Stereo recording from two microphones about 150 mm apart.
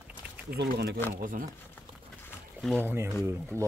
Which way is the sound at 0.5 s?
90° right.